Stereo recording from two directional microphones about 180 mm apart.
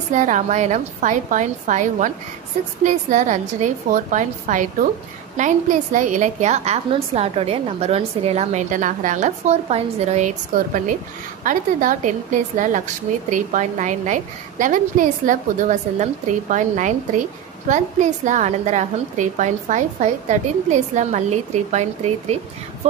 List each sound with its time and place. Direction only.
0.1 s a woman's voice: 45° right (ahead or behind)